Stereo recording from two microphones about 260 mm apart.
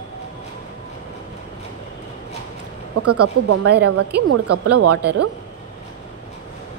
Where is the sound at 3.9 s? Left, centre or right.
Right.